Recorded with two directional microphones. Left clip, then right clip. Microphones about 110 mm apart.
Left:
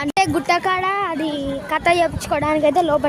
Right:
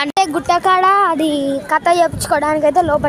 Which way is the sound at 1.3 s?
55° right (ahead or behind).